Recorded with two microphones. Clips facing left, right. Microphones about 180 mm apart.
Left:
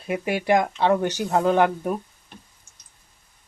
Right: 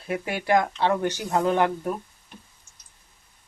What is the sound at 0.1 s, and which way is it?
Speech, 20° left (ahead or behind).